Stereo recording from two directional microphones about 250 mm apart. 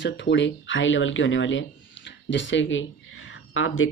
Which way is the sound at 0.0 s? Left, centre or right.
Left.